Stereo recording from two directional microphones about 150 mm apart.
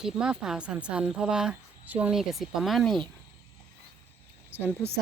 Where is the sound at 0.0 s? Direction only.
5° right (ahead or behind).